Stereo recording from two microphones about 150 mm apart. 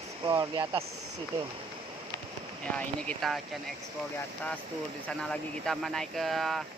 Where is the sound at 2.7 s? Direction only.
5° left (ahead or behind).